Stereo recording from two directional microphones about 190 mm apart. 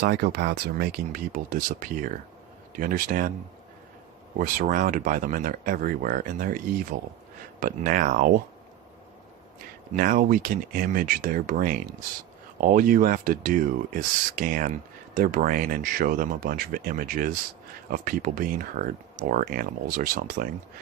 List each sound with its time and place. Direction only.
0.0 s speech: 60° right (ahead or behind)
4.4 s speech: 45° right (ahead or behind)
9.9 s speech: 45° right (ahead or behind)